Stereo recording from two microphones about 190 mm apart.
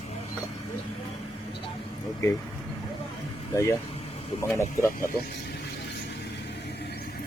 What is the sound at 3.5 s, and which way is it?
Speech, 15° left (ahead or behind).